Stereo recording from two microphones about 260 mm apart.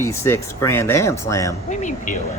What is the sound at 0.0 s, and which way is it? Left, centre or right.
Speech, centre.